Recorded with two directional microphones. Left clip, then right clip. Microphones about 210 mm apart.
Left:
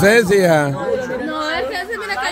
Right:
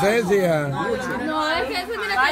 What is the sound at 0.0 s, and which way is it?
Speech, 40° left (ahead or behind).